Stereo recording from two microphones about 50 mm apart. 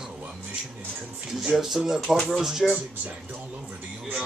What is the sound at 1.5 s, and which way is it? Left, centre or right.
Speech, centre.